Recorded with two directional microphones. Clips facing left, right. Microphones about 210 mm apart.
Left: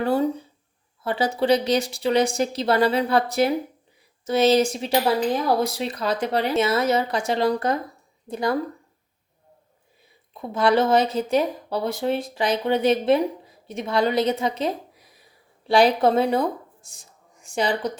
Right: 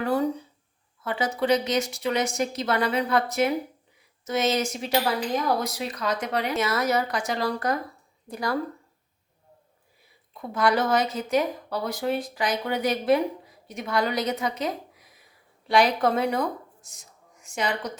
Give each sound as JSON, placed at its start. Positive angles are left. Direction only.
{"t": 0.0, "sound": "a woman's voice", "side_deg": 25}
{"t": 10.3, "sound": "speech", "side_deg": 25}